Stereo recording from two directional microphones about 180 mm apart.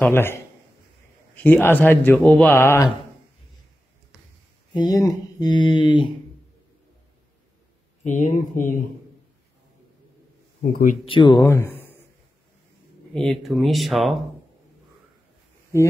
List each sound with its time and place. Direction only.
0.1 s speech: 10° left (ahead or behind)
4.7 s speech: 20° left (ahead or behind)
8.0 s speech: 45° left (ahead or behind)
10.6 s speech: 50° left (ahead or behind)
11.1 s speech: 25° left (ahead or behind); by 12.0 s 10° left (ahead or behind)
13.1 s speech: centre (ahead or behind)